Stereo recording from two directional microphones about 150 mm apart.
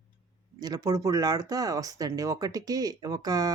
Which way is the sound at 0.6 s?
25° right (ahead or behind).